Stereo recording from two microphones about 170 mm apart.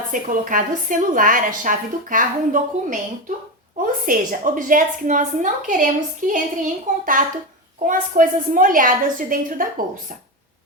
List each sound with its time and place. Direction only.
0.1 s a woman's voice: 50° right (ahead or behind)